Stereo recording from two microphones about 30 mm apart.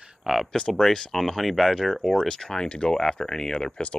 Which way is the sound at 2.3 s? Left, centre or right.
Left.